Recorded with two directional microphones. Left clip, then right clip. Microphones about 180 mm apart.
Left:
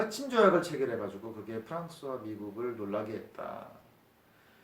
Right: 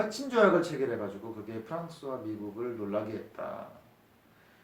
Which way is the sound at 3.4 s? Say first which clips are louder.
Right 3 dB; 30° left (ahead or behind).